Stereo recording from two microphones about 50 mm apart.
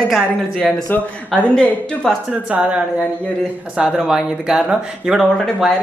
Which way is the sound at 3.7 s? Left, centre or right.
Right.